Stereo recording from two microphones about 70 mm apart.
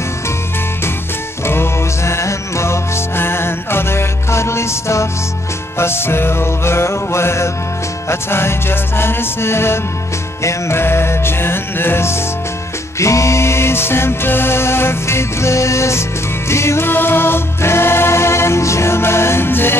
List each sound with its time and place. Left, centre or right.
1.4 s music: left